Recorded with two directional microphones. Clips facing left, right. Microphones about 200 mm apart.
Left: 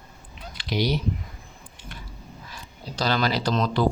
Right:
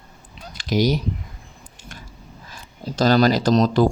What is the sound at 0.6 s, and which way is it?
Speech, 45° right (ahead or behind).